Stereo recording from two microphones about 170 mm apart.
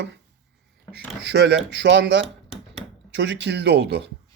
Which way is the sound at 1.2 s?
75° right (ahead or behind).